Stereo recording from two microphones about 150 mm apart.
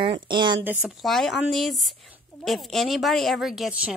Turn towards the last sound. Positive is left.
turn(degrees=-5)  # may be behind; listen again after turning